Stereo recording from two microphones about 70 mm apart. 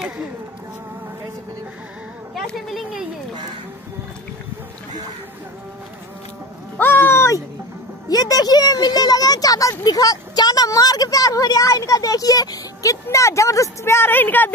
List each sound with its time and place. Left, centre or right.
2.3 s speech: centre
6.8 s a sound: left
8.1 s speech: left